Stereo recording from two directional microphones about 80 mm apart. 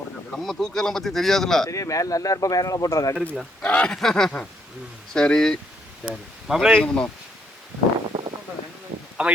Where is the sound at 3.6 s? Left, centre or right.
Centre.